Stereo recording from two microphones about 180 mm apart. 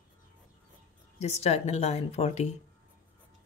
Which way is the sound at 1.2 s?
35° left (ahead or behind).